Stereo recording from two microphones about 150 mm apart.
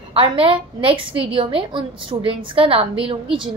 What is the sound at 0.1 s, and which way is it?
A woman's voice, 35° right (ahead or behind).